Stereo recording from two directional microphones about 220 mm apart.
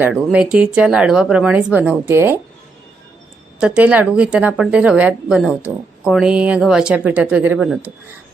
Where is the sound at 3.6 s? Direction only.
5° right (ahead or behind).